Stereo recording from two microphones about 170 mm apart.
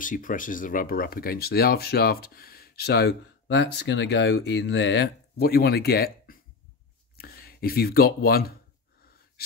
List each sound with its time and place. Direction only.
0.0 s speech: 50° left (ahead or behind)